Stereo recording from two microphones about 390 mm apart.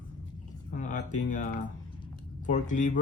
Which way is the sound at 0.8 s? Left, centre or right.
Centre.